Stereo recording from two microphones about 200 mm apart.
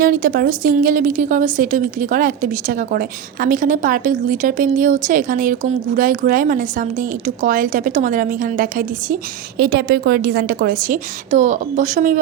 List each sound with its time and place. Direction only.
0.0 s a woman's voice: 45° right (ahead or behind)